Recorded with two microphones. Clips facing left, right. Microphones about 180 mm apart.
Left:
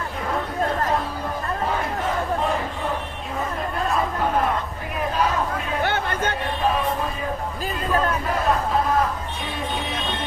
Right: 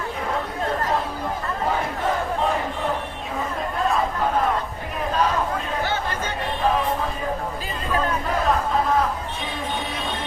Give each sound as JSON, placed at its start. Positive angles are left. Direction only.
{"t": 5.8, "sound": "chatter", "side_deg": 60}